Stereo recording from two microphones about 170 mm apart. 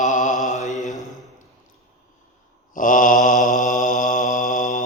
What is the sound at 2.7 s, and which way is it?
Mantra, 50° left (ahead or behind).